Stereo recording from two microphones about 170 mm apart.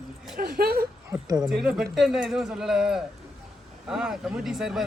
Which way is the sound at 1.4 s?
5° right (ahead or behind).